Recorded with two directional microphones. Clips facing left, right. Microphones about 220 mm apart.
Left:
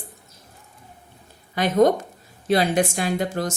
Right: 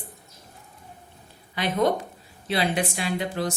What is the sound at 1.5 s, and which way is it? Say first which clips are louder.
A woman's voice: left 6 dB; 45° left (ahead or behind).